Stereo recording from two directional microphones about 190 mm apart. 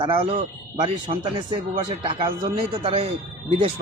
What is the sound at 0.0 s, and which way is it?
A man's voice, 30° right (ahead or behind).